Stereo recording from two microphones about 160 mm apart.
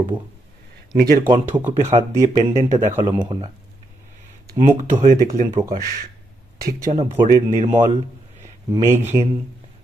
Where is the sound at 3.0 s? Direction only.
30° right (ahead or behind).